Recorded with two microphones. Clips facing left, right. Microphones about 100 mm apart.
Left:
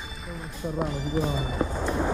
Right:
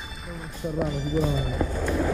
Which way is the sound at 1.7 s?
25° left (ahead or behind).